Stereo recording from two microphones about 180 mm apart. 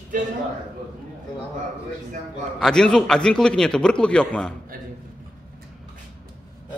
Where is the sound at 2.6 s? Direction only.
5° left (ahead or behind).